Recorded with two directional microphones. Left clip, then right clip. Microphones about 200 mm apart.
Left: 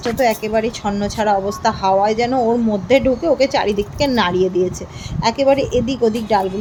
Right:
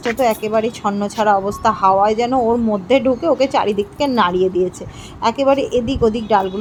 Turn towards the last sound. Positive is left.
turn(degrees=-5)  # may be behind; listen again after turning